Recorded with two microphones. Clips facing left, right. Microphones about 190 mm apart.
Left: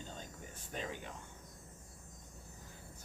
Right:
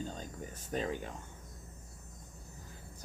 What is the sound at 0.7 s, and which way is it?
Speech, 40° right (ahead or behind).